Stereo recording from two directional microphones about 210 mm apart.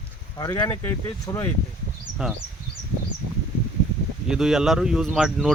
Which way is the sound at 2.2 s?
5° right (ahead or behind).